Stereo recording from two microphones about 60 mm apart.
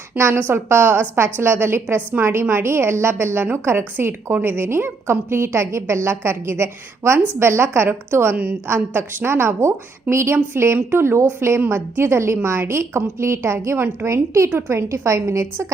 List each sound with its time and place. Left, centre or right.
0.3 s a woman's voice: right